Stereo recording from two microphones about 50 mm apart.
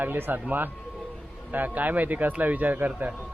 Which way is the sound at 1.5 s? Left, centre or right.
Right.